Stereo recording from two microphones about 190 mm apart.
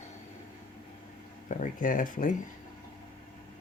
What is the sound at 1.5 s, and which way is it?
Speech, 45° left (ahead or behind).